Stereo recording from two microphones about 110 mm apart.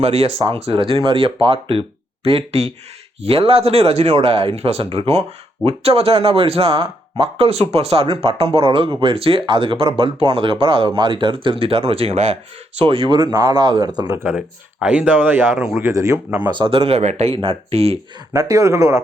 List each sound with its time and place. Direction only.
0.0 s speech: 65° right (ahead or behind)
3.2 s speech: 60° right (ahead or behind)
12.8 s speech: 50° right (ahead or behind)
14.3 s speech: 10° right (ahead or behind)
15.8 s speech: 30° right (ahead or behind)
16.5 s speech: 50° right (ahead or behind)
18.3 s speech: 30° right (ahead or behind)